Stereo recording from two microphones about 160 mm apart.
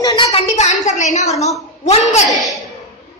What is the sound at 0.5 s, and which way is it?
Speech, 45° left (ahead or behind).